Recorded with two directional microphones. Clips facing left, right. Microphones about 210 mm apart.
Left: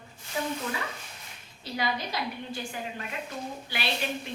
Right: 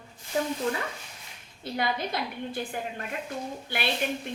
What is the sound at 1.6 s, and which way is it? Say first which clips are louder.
A woman's voice: right 2 dB; 55° right (ahead or behind).